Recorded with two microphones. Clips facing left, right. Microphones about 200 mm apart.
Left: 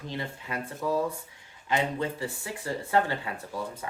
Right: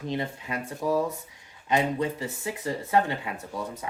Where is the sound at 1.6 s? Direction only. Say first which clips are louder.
Right 3 dB; 20° right (ahead or behind).